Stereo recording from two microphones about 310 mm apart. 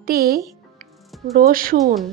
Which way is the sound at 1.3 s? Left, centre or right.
Right.